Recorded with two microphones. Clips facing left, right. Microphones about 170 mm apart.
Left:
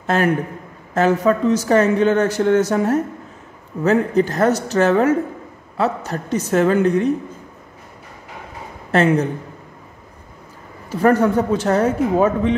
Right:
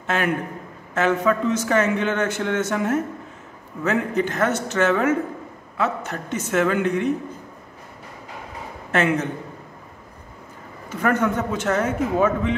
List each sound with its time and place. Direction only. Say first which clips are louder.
0.0 s a man's voice: left 5 dB; 35° left (ahead or behind)
8.9 s a man's voice: left 5 dB; 35° left (ahead or behind)
10.9 s a man's voice: left 6 dB; 35° left (ahead or behind)